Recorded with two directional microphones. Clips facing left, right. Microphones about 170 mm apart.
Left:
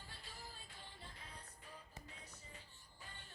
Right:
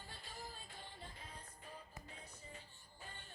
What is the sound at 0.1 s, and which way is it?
Music, 45° right (ahead or behind).